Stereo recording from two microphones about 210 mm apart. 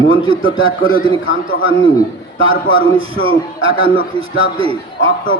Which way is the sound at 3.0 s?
90° right.